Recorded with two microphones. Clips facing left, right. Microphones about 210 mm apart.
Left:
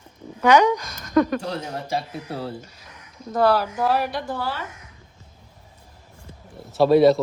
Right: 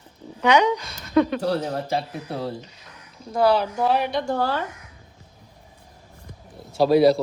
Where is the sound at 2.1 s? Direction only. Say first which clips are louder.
Right 1 dB; 10° left (ahead or behind).